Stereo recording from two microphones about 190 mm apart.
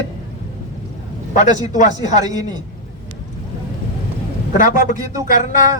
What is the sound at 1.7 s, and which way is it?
Speech, 40° left (ahead or behind).